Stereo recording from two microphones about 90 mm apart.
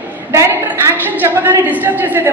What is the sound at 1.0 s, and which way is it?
A woman's voice, 20° right (ahead or behind).